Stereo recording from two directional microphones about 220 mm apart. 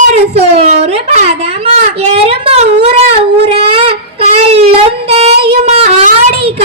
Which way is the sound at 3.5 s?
25° right (ahead or behind).